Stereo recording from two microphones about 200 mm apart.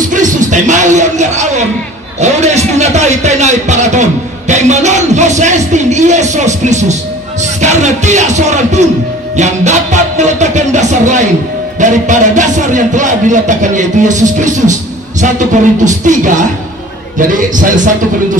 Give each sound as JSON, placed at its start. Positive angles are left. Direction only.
{"t": 0.1, "sound": "music", "side_deg": -40}
{"t": 2.1, "sound": "a man's voice", "side_deg": -35}
{"t": 9.4, "sound": "music", "side_deg": -35}
{"t": 11.8, "sound": "speech", "side_deg": -40}